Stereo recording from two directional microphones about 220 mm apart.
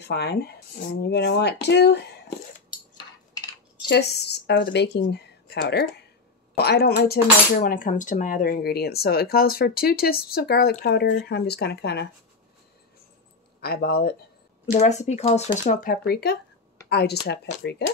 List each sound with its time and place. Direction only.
0.0 s speech: 50° left (ahead or behind)
3.9 s speech: 50° left (ahead or behind)
13.6 s speech: 45° left (ahead or behind)
14.7 s speech: 30° left (ahead or behind); by 17.8 s 50° left (ahead or behind)